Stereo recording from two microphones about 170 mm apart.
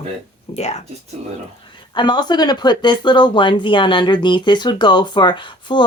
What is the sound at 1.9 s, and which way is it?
Speech, 25° left (ahead or behind).